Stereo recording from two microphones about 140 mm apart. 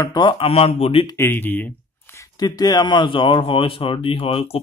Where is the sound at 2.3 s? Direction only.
30° left (ahead or behind).